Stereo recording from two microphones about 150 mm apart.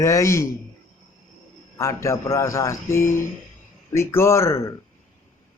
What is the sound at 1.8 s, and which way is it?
Speech, 20° left (ahead or behind).